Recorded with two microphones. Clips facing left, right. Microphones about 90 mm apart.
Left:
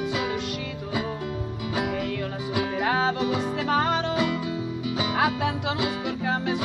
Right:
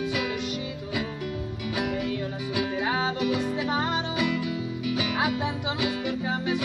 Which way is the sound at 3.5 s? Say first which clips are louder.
Left 3 dB; 55° left (ahead or behind).